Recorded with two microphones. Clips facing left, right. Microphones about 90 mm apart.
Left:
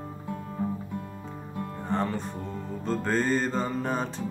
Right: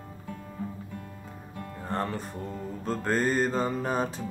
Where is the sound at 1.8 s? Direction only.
Centre (ahead or behind).